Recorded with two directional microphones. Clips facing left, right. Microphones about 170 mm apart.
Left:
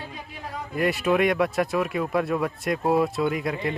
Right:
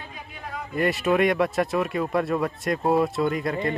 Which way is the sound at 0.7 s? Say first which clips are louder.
Even; centre (ahead or behind).